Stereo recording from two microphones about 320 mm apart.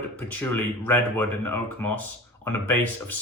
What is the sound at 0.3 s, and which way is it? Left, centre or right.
Speech, centre.